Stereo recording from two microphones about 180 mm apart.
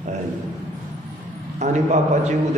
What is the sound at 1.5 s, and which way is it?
Speech, 40° right (ahead or behind).